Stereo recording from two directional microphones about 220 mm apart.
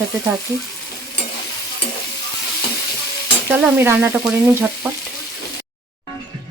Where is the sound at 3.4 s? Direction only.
5° right (ahead or behind).